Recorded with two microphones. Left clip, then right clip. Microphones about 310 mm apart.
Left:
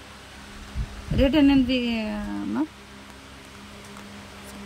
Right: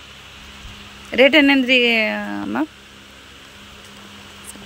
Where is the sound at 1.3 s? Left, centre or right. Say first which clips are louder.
Right 7 dB; centre.